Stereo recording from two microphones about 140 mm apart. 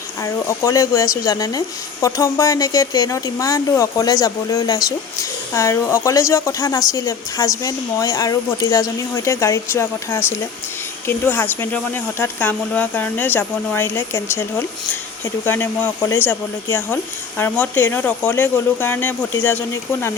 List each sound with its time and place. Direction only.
0.4 s speech: 20° left (ahead or behind)
15.4 s speech: 15° left (ahead or behind)